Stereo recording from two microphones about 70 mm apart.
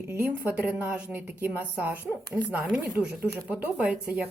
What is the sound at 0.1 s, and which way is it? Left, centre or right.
Speech, right.